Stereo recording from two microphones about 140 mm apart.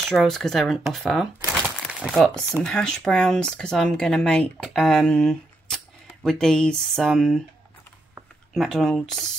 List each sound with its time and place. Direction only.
0.0 s speech: centre (ahead or behind)
2.3 s speech: 15° right (ahead or behind)
2.6 s speech: 5° left (ahead or behind)
8.5 s speech: 5° left (ahead or behind)